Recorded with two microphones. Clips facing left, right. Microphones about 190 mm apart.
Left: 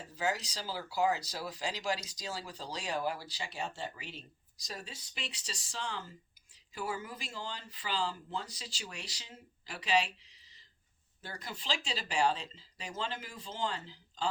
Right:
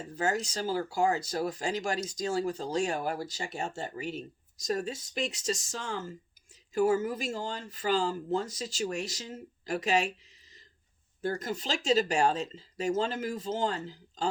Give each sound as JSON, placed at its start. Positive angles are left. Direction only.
{"t": 0.2, "sound": "speech", "side_deg": -50}